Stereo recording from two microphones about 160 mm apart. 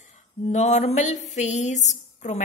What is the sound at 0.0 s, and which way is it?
A woman's voice, 45° left (ahead or behind).